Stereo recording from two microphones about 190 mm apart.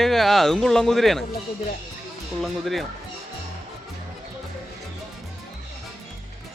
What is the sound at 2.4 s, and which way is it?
Speech, centre (ahead or behind).